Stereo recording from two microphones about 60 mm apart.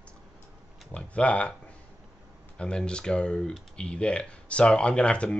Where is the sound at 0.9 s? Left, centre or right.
Centre.